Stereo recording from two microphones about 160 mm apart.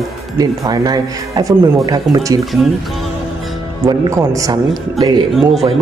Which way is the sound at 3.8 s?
20° right (ahead or behind).